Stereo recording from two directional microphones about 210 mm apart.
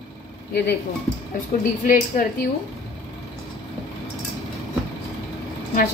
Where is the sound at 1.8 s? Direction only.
40° left (ahead or behind).